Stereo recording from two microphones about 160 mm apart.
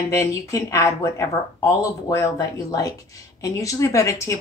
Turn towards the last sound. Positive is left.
turn(degrees=20)  # may be behind; listen again after turning